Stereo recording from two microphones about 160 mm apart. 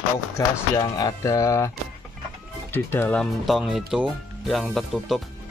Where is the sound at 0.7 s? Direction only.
20° left (ahead or behind).